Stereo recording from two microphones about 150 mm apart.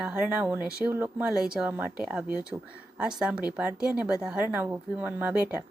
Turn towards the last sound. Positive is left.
turn(degrees=-10)  # may be behind; listen again after turning